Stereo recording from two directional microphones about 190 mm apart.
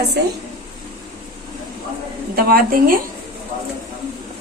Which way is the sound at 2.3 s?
50° right (ahead or behind).